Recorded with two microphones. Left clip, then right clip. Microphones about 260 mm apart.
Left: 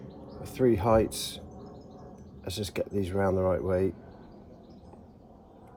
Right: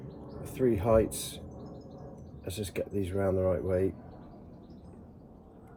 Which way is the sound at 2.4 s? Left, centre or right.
Left.